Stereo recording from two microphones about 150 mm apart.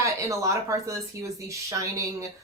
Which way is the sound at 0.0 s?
20° right (ahead or behind).